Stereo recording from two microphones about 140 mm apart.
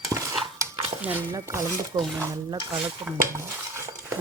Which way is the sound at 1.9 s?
25° right (ahead or behind).